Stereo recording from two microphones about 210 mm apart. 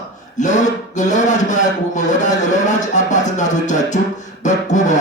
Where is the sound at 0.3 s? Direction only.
35° left (ahead or behind).